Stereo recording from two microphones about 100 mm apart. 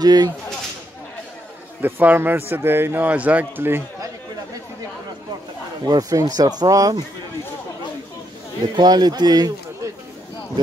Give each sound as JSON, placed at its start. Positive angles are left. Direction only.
{"t": 0.0, "sound": "a man's voice", "side_deg": -40}
{"t": 1.8, "sound": "a man's voice", "side_deg": -20}
{"t": 5.9, "sound": "speech", "side_deg": -40}
{"t": 8.7, "sound": "a man's voice", "side_deg": -45}